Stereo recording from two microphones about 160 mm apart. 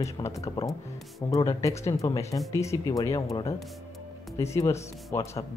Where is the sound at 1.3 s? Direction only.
20° left (ahead or behind).